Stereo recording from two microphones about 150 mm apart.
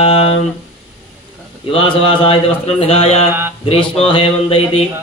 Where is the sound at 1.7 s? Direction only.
35° left (ahead or behind).